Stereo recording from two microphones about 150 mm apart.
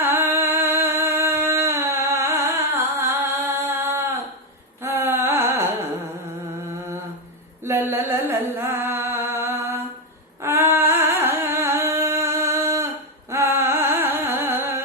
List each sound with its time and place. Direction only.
0.0 s music: 15° right (ahead or behind)
3.8 s a sound: 15° right (ahead or behind)
4.8 s music: 20° right (ahead or behind)
7.6 s humming: 15° right (ahead or behind)
10.4 s singing: 15° right (ahead or behind)
13.3 s music: 20° right (ahead or behind)